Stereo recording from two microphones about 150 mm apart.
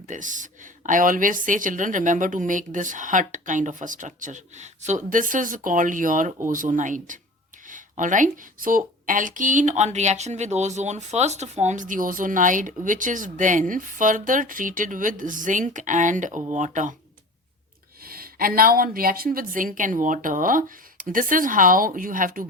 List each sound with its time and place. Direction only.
0.1 s speech: 60° right (ahead or behind)
18.0 s speech: 80° right